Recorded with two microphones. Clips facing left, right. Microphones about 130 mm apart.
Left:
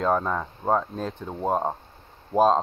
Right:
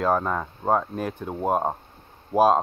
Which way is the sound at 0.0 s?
5° right (ahead or behind).